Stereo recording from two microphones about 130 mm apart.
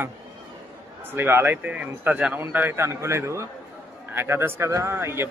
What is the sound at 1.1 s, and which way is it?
A man's voice, 15° right (ahead or behind).